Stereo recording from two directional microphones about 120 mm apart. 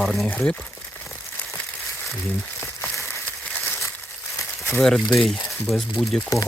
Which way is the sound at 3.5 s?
15° left (ahead or behind).